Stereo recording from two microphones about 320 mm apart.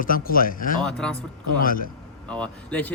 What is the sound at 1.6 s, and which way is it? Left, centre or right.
Speech, left.